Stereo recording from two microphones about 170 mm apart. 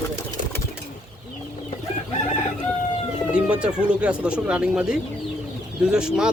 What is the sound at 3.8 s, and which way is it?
Speech, 5° right (ahead or behind).